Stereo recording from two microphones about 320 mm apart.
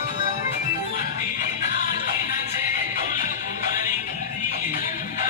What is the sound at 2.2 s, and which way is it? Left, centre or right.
Music, left.